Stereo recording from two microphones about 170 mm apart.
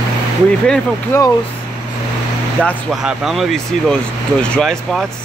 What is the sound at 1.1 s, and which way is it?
Speech, 15° left (ahead or behind).